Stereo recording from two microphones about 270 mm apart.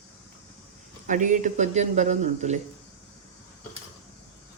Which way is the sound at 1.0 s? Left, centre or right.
Right.